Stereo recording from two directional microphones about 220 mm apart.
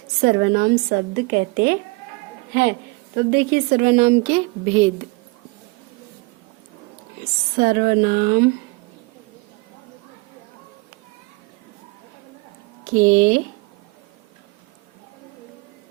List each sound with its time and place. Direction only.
0.2 s a woman's voice: 45° right (ahead or behind)
3.2 s a woman's voice: 45° right (ahead or behind); by 4.9 s 25° right (ahead or behind)
7.6 s a woman's voice: 45° right (ahead or behind)
12.9 s a woman's voice: 45° right (ahead or behind)